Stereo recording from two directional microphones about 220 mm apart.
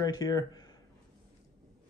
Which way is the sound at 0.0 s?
15° left (ahead or behind).